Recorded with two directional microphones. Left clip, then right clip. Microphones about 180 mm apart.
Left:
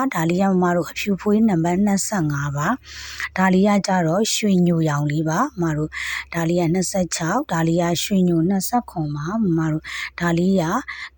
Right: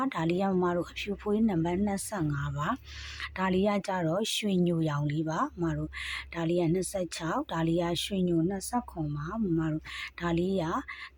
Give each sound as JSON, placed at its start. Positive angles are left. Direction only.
{"t": 0.0, "sound": "speech", "side_deg": 40}